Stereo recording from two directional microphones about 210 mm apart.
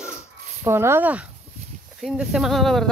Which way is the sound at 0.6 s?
10° right (ahead or behind).